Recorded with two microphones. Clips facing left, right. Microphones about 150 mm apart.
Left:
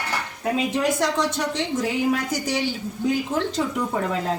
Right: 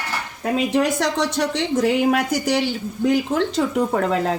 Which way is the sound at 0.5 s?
70° right (ahead or behind).